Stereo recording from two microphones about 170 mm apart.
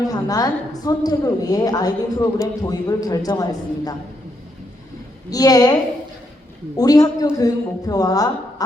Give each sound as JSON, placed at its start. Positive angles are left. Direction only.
{"t": 0.0, "sound": "a woman's voice", "side_deg": 20}
{"t": 5.3, "sound": "a woman's voice", "side_deg": 20}
{"t": 6.7, "sound": "a woman's voice", "side_deg": 20}